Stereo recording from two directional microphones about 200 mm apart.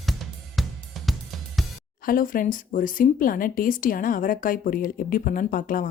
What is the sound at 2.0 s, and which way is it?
Speech, 45° left (ahead or behind).